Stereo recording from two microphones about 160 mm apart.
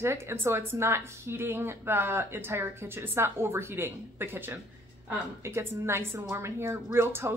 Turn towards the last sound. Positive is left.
turn(degrees=-15)  # may be behind; listen again after turning